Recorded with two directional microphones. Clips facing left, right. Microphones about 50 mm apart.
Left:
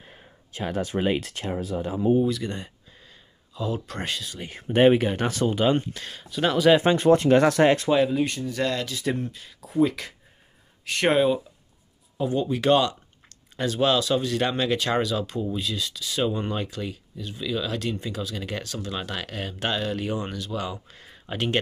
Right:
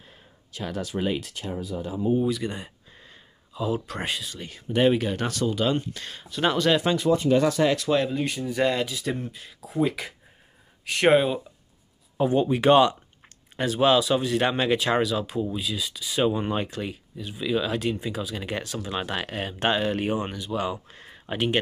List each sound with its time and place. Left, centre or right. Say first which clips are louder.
0.5 s speech: left 3 dB; left
1.2 s speech: left 3 dB; left
2.1 s speech: left 1 dB; centre
4.6 s speech: left 3 dB; left
4.9 s speech: left 3 dB; centre
5.9 s speech: left 1 dB; centre
7.1 s speech: left 4 dB; left
7.9 s speech: left 2 dB; centre
8.4 s speech: right 3 dB; centre
8.9 s speech: left 2 dB; centre
12.2 s speech: right 3 dB; right
20.2 s speech: right 2 dB; centre